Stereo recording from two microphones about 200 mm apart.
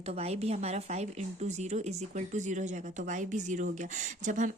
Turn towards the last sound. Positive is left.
turn(degrees=-40)  # may be behind; listen again after turning